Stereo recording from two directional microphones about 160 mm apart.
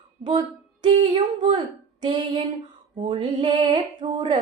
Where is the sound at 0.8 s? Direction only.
30° right (ahead or behind).